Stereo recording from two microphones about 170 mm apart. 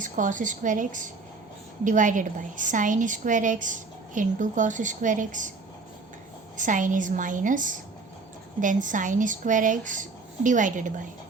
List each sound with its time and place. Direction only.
0.0 s a woman's voice: 50° right (ahead or behind)
6.6 s a woman's voice: 50° right (ahead or behind)